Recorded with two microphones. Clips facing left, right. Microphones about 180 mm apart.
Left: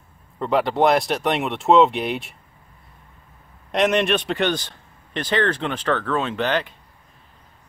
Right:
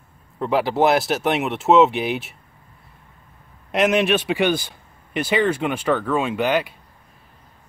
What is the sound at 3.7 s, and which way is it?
Speech, 5° right (ahead or behind).